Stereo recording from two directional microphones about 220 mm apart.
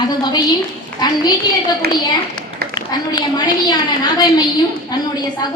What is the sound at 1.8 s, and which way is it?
Speech, 45° right (ahead or behind).